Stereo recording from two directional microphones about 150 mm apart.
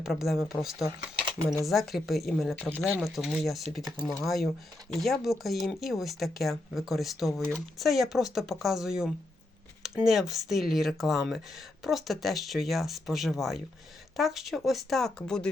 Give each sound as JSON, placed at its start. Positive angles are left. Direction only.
{"t": 0.0, "sound": "speech", "side_deg": 0}
{"t": 2.8, "sound": "speech", "side_deg": -5}